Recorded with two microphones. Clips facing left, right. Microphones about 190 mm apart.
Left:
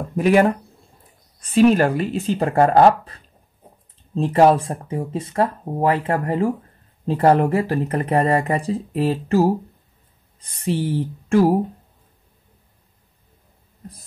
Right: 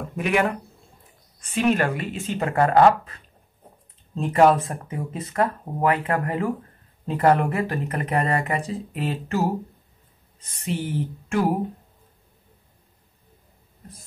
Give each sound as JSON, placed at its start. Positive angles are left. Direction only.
{"t": 0.1, "sound": "speech", "side_deg": 35}
{"t": 10.6, "sound": "speech", "side_deg": 35}